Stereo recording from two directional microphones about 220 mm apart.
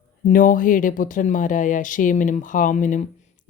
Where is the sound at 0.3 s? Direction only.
35° left (ahead or behind).